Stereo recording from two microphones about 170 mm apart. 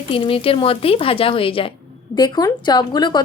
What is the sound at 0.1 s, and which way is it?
A woman's voice, 35° left (ahead or behind).